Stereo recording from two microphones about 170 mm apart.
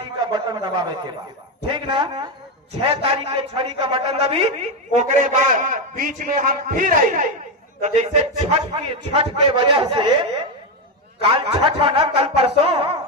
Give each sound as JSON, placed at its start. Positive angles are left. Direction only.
{"t": 0.3, "sound": "a man's voice", "side_deg": -25}
{"t": 4.9, "sound": "a man's voice", "side_deg": -45}